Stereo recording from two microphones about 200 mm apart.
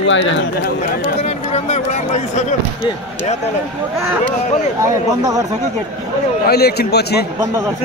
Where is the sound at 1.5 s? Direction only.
35° left (ahead or behind).